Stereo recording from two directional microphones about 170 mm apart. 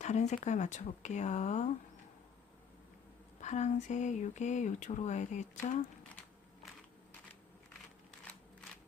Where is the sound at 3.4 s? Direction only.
45° left (ahead or behind).